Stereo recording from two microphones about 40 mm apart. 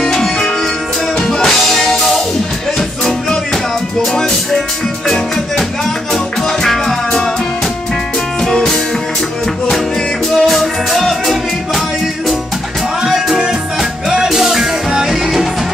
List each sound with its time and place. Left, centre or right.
0.0 s music: centre
4.0 s music: centre
8.5 s music: centre
10.4 s music: centre
13.0 s music: centre